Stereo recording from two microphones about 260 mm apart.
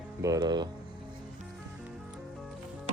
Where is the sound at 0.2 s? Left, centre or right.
Centre.